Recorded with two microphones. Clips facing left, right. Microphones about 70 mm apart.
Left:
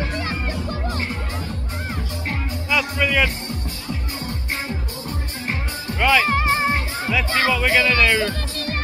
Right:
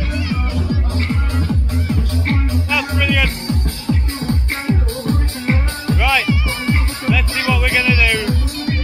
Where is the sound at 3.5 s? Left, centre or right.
Right.